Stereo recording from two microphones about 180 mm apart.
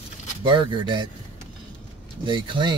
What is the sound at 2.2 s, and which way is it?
Speech, 25° right (ahead or behind).